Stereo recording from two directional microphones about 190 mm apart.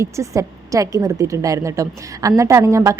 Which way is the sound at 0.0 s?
15° right (ahead or behind).